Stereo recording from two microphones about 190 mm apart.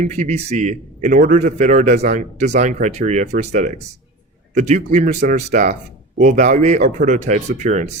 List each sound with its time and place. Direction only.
0.0 s a man's voice: 40° right (ahead or behind)